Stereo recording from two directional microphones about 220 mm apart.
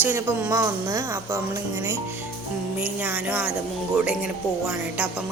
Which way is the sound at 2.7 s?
5° right (ahead or behind).